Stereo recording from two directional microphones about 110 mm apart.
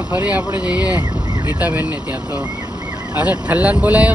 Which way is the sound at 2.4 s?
35° right (ahead or behind).